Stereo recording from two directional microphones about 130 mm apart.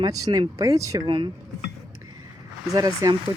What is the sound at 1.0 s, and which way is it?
Speech, 40° right (ahead or behind).